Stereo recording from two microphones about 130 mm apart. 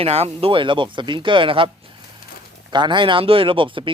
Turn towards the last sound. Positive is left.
turn(degrees=-40)  # may be behind; listen again after turning